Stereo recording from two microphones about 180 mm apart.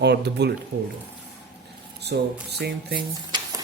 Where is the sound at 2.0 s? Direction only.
65° right (ahead or behind).